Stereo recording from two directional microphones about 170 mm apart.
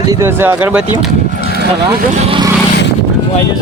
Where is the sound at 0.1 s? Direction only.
15° right (ahead or behind).